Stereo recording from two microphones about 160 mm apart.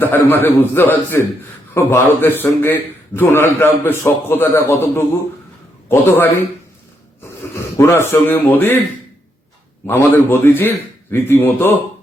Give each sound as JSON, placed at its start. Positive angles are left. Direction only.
{"t": 0.0, "sound": "a man's voice", "side_deg": 10}
{"t": 7.5, "sound": "a man's voice", "side_deg": 15}
{"t": 9.8, "sound": "a man's voice", "side_deg": 15}